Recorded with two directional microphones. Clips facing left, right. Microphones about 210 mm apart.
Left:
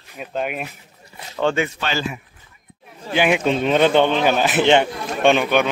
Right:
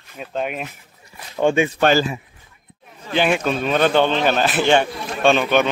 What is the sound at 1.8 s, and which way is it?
Speech, 40° right (ahead or behind).